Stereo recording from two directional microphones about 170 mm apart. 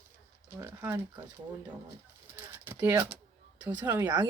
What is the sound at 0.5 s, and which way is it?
Speech, 15° right (ahead or behind).